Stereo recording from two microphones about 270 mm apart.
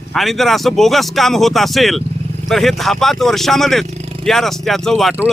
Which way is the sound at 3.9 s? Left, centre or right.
Right.